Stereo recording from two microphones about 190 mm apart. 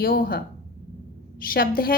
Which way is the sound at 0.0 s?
50° left (ahead or behind).